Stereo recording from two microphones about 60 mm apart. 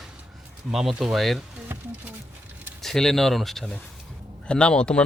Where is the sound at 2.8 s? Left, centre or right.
Centre.